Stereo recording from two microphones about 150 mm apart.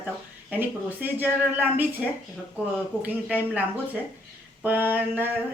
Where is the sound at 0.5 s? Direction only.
10° right (ahead or behind).